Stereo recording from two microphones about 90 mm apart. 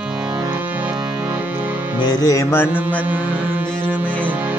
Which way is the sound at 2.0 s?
40° left (ahead or behind).